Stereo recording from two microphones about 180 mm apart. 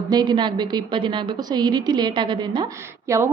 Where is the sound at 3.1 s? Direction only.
15° right (ahead or behind).